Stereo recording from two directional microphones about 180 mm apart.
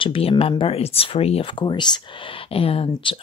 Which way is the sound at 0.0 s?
30° left (ahead or behind).